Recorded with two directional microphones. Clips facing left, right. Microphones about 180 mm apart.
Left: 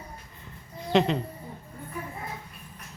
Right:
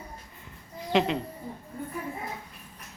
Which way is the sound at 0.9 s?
5° right (ahead or behind).